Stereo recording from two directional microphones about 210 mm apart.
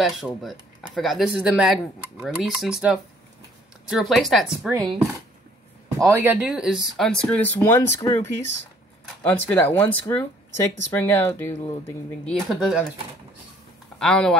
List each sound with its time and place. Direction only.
0.0 s speech: centre (ahead or behind)
5.9 s speech: 10° right (ahead or behind); by 11.7 s 10° left (ahead or behind)
12.3 s speech: centre (ahead or behind)
13.9 s speech: 5° left (ahead or behind)